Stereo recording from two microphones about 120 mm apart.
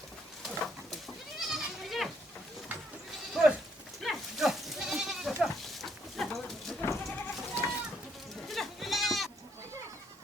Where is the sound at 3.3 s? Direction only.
5° right (ahead or behind).